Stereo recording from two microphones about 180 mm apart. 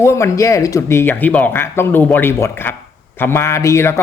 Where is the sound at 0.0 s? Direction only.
15° left (ahead or behind).